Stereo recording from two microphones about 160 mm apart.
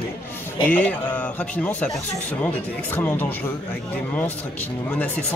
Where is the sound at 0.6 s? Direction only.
10° left (ahead or behind).